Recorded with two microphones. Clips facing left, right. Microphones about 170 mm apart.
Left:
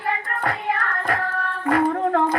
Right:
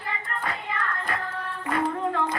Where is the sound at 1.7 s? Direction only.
65° left (ahead or behind).